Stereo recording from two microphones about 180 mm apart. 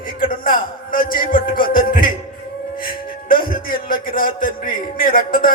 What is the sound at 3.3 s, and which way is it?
A man's voice, 55° left (ahead or behind).